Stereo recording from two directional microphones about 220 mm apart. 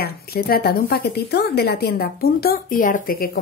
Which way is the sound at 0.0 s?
45° left (ahead or behind).